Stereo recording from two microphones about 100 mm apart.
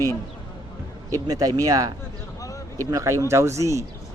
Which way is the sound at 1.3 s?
35° right (ahead or behind).